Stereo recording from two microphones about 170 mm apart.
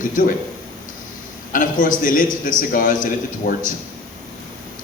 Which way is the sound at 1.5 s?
50° left (ahead or behind).